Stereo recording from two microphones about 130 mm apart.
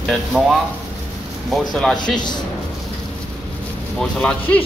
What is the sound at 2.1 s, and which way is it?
Speech, 35° left (ahead or behind).